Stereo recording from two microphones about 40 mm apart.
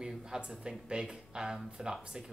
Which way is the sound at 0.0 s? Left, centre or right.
Centre.